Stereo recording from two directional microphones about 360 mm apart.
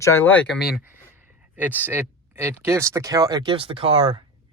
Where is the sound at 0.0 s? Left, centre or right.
Centre.